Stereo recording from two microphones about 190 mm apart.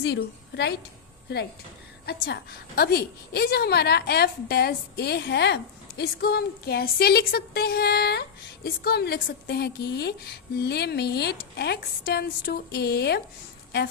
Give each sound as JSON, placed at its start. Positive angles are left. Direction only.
{"t": 0.0, "sound": "a woman's voice", "side_deg": 65}